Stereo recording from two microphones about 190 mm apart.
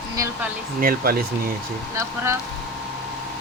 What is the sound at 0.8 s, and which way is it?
Speech, 50° right (ahead or behind).